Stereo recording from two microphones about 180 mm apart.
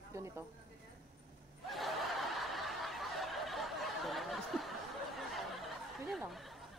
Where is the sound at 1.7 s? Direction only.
Centre (ahead or behind).